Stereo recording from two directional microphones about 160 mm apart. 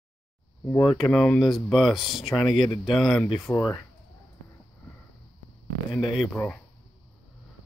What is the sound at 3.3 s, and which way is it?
Speech, 20° left (ahead or behind).